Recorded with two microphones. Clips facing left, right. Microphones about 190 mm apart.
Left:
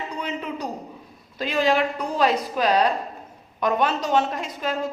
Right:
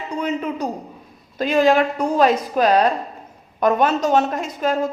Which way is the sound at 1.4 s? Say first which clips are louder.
Right 5 dB; 50° right (ahead or behind).